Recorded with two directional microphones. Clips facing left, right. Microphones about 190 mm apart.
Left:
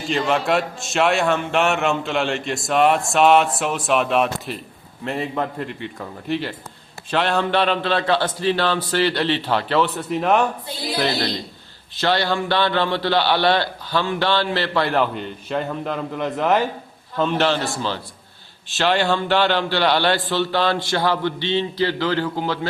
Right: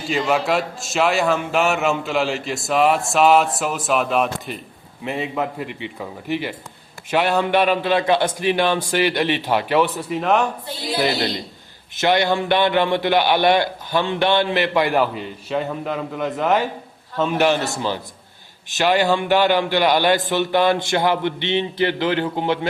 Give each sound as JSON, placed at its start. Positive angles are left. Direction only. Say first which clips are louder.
{"t": 0.1, "sound": "a man's voice", "louder": "even", "side_deg": -5}
{"t": 10.2, "sound": "a man's voice", "louder": "left 1 dB", "side_deg": 0}
{"t": 11.9, "sound": "a man's voice", "louder": "right 2 dB", "side_deg": -15}
{"t": 17.3, "sound": "a man's voice", "louder": "right 4 dB", "side_deg": -15}